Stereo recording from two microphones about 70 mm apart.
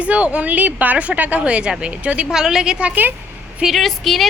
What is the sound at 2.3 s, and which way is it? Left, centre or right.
Speech, centre.